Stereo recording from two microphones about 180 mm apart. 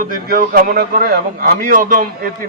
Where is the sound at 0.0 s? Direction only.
50° right (ahead or behind).